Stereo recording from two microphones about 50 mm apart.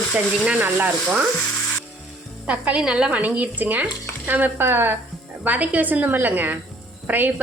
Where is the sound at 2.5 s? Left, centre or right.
Right.